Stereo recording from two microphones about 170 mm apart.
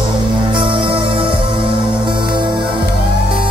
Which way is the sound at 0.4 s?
30° right (ahead or behind).